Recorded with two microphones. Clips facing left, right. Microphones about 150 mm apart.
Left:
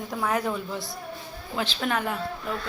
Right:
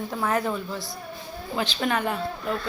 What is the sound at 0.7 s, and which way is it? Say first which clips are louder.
Speech: even; 25° left (ahead or behind).